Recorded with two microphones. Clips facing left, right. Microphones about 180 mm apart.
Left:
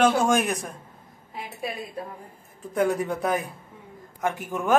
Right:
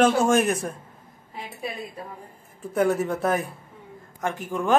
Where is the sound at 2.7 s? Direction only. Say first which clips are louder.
Right 2 dB; 5° right (ahead or behind).